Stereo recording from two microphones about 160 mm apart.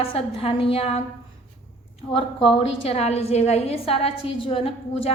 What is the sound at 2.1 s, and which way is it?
A woman's voice, 35° left (ahead or behind).